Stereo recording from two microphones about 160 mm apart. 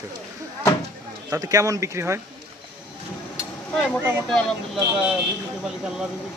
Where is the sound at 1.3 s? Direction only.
20° right (ahead or behind).